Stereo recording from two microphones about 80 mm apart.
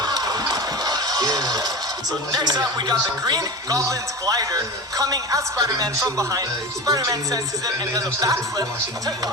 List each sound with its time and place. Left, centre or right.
0.0 s music: right
2.3 s a man's voice: right